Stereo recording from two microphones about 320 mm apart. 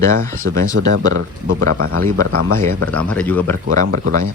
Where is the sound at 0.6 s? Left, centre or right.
Right.